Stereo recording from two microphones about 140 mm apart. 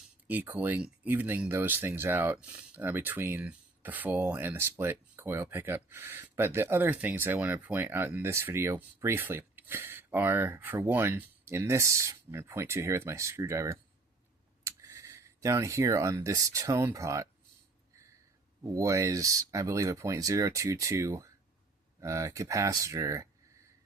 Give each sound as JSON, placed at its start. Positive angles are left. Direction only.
{"t": 0.3, "sound": "speech", "side_deg": -15}
{"t": 18.6, "sound": "speech", "side_deg": -25}